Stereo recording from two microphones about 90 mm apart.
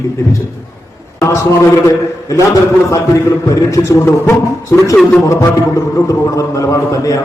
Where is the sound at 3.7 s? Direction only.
35° left (ahead or behind).